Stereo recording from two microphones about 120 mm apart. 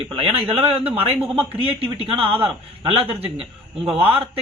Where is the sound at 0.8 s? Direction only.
15° right (ahead or behind).